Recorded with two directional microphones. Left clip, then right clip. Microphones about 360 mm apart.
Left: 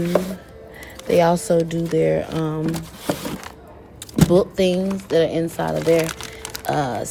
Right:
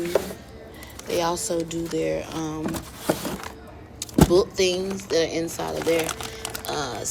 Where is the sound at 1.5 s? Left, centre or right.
Left.